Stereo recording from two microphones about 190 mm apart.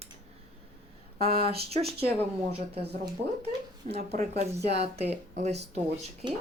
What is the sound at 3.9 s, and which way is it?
Speech, 35° right (ahead or behind).